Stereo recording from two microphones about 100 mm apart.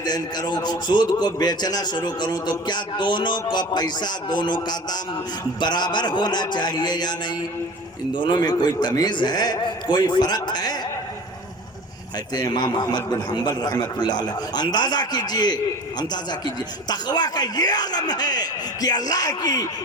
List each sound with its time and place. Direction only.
0.0 s a man's voice: 45° left (ahead or behind)
12.3 s a man's voice: 45° left (ahead or behind)